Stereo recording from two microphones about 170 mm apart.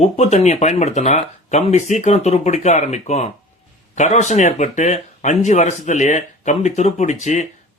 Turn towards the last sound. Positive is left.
turn(degrees=40)  # may be behind; listen again after turning